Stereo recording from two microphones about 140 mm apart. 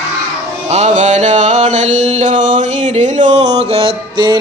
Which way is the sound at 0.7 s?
55° right (ahead or behind).